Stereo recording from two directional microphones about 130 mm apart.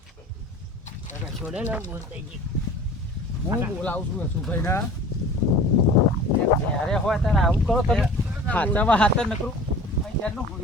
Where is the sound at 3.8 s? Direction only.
15° left (ahead or behind).